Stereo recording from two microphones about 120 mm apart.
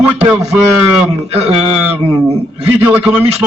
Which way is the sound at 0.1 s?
20° right (ahead or behind).